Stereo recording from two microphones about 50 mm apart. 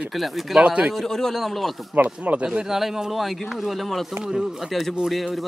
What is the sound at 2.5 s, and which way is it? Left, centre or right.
Speech, centre.